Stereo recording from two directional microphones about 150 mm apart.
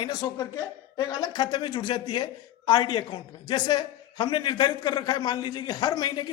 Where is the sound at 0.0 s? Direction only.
30° left (ahead or behind).